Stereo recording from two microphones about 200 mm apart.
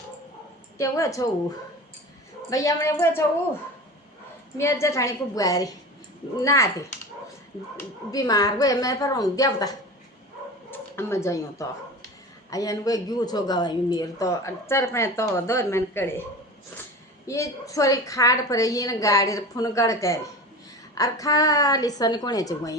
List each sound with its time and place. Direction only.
0.8 s a woman's voice: 15° left (ahead or behind)
2.5 s a woman's voice: 15° left (ahead or behind)
4.5 s a woman's voice: 15° left (ahead or behind)
17.2 s a woman's voice: 15° left (ahead or behind)